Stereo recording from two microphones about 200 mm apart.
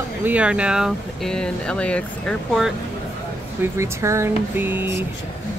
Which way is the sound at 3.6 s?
15° right (ahead or behind).